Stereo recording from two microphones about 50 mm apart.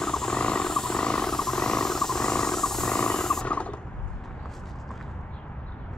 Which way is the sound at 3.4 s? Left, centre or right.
Left.